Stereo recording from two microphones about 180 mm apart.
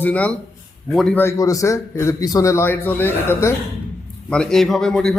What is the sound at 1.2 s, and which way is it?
A man's voice, 15° left (ahead or behind).